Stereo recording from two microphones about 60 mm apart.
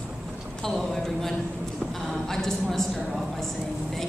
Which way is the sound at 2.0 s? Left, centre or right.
Centre.